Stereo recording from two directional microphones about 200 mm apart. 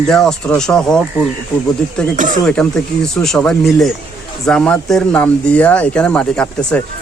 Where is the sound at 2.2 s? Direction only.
40° right (ahead or behind).